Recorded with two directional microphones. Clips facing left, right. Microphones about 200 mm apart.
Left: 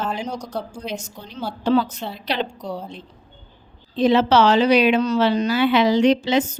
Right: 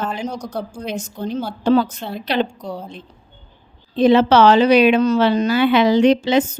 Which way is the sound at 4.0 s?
55° right (ahead or behind).